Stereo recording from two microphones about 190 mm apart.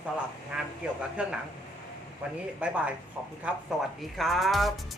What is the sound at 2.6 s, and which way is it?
Speech, 5° right (ahead or behind).